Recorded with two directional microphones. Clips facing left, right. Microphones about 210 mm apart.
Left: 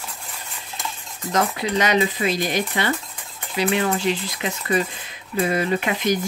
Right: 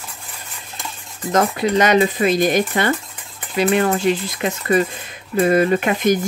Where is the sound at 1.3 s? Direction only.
45° right (ahead or behind).